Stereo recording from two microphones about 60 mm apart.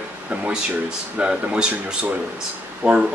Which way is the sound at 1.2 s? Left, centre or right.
Centre.